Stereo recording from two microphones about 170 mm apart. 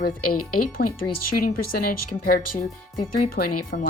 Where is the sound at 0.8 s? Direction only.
65° left (ahead or behind).